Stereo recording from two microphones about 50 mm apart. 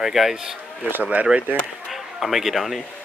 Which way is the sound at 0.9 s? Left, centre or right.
Right.